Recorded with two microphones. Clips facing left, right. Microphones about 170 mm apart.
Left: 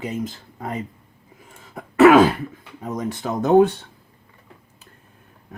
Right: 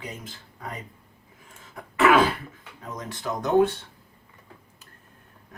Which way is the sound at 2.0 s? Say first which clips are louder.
Left 8 dB; 45° left (ahead or behind).